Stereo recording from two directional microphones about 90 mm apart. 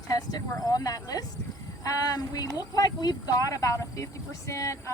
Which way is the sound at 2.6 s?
45° left (ahead or behind).